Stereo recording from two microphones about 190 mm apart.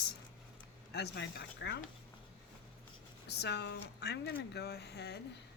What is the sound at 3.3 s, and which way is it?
Speech, 60° left (ahead or behind).